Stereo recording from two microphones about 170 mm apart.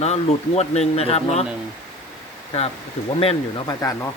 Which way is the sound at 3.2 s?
35° left (ahead or behind).